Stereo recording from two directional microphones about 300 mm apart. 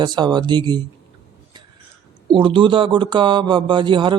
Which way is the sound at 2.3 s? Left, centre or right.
Centre.